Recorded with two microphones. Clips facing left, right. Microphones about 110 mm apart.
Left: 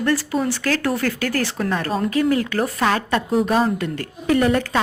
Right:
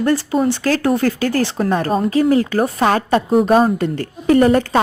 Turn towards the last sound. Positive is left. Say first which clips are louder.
# right 5 dB
turn(degrees=-40)  # may be behind; listen again after turning